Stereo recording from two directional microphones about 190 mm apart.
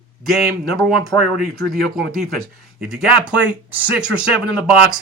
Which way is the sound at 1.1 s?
15° left (ahead or behind).